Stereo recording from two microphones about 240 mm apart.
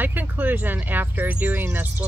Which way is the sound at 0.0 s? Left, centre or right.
Centre.